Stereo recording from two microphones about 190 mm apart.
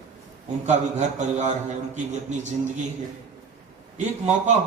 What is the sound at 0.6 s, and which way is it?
A man's voice, 40° right (ahead or behind).